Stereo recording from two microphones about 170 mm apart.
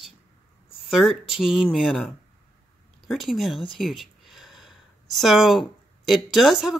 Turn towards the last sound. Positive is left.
turn(degrees=0)  # may be behind; listen again after turning